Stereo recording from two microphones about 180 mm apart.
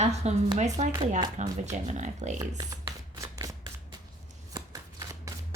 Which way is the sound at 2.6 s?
20° right (ahead or behind).